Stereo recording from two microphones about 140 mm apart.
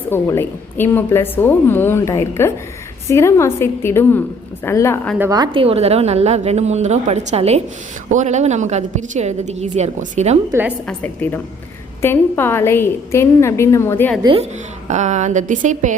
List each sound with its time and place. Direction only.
0.1 s a woman's voice: 15° left (ahead or behind)
5.3 s a woman's voice: 35° right (ahead or behind); by 10.3 s 55° right (ahead or behind)
10.5 s a woman's voice: 20° right (ahead or behind)
10.8 s a woman's voice: 10° left (ahead or behind)
14.3 s a woman's voice: 35° right (ahead or behind)
14.8 s a woman's voice: 55° right (ahead or behind)